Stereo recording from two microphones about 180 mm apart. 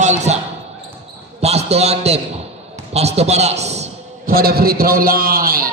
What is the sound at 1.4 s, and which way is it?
A man's voice, 35° right (ahead or behind).